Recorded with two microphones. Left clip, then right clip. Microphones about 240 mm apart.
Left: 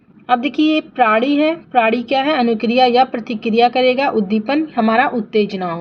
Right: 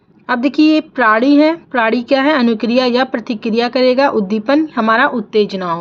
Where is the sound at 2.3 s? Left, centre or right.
Right.